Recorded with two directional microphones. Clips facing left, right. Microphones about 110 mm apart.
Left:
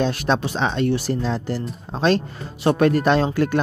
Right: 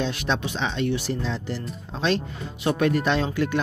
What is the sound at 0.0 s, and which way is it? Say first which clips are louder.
Speech: left 5 dB; 45° left (ahead or behind).